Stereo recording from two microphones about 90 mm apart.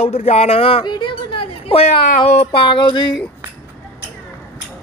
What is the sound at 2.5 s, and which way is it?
Music, 70° left (ahead or behind).